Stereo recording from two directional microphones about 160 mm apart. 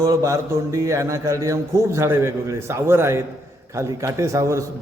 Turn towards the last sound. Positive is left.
turn(degrees=-20)  # may be behind; listen again after turning